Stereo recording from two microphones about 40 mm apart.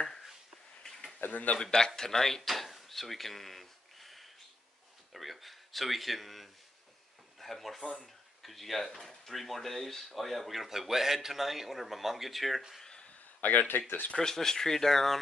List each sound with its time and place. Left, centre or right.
1.3 s speech: left
1.6 s speech: centre
12.8 s a sound: left
13.4 s speech: left
13.7 s speech: left
14.1 s speech: centre